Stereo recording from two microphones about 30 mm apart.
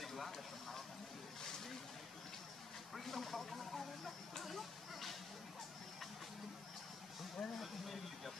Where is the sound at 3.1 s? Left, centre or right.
Centre.